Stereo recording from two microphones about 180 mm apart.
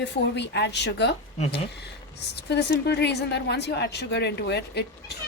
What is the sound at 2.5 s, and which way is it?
Speech, 65° left (ahead or behind).